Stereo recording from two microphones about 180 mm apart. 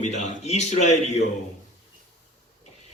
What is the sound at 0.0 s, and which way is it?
Speech, 40° left (ahead or behind).